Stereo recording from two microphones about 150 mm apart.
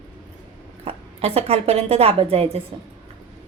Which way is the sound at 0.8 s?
40° right (ahead or behind).